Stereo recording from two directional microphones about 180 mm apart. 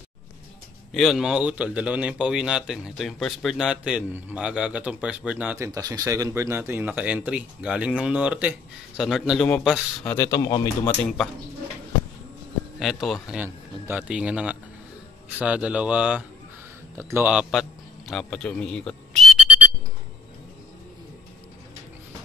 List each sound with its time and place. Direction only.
0.9 s speech: centre (ahead or behind)
5.7 s speech: 20° right (ahead or behind); by 9.8 s centre (ahead or behind)
10.0 s speech: 15° left (ahead or behind)
12.7 s a man's voice: centre (ahead or behind)